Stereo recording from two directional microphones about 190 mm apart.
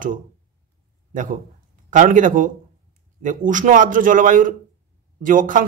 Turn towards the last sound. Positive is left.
turn(degrees=-45)  # may be behind; listen again after turning